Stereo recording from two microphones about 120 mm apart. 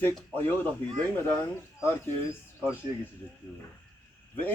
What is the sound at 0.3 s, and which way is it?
Speech, 15° left (ahead or behind).